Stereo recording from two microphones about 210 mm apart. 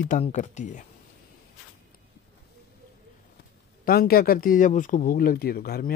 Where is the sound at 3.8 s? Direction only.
45° left (ahead or behind).